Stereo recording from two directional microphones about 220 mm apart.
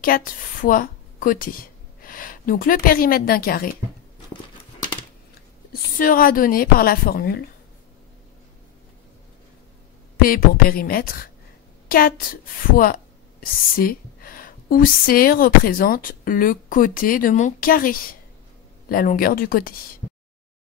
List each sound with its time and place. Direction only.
0.0 s speech: 40° left (ahead or behind)
5.7 s a woman's voice: 40° left (ahead or behind)
10.2 s a woman's voice: 40° left (ahead or behind)